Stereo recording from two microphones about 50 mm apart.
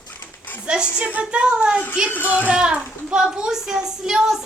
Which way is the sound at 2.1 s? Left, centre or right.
Left.